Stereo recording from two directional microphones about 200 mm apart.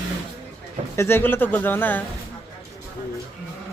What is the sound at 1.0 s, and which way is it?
A man's voice, 10° left (ahead or behind).